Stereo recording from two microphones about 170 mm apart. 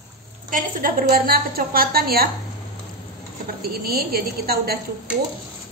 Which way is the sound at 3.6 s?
65° right (ahead or behind).